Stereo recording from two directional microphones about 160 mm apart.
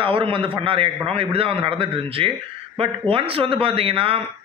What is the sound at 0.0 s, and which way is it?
A man's voice, 35° right (ahead or behind).